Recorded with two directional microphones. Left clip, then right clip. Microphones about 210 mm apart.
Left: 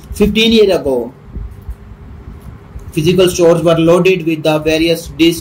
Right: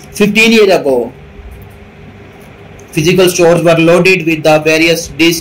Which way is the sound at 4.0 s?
30° left (ahead or behind).